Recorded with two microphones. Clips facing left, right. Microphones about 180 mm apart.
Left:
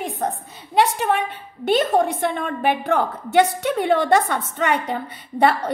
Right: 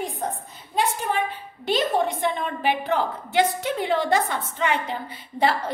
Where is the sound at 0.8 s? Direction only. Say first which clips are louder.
Left 5 dB; 70° left (ahead or behind).